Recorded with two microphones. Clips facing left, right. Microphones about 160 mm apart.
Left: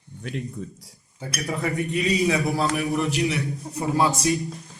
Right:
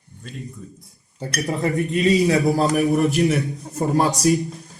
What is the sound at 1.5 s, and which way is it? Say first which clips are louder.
A man's voice: right 4 dB; 40° right (ahead or behind).